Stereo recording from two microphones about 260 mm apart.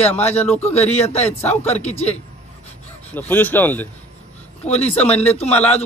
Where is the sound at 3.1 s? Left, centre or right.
Centre.